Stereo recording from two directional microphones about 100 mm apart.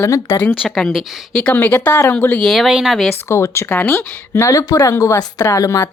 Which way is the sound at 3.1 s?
30° left (ahead or behind).